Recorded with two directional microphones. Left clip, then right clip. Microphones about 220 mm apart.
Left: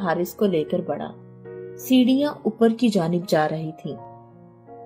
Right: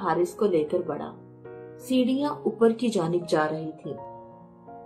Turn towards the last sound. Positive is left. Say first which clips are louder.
# left 3 dB
turn(degrees=45)  # may be behind; listen again after turning